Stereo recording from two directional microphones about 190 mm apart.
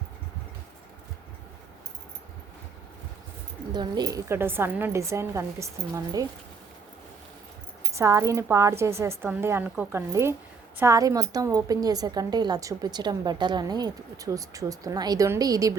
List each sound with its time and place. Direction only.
3.7 s a woman's voice: 20° right (ahead or behind)
7.9 s a woman's voice: 15° right (ahead or behind)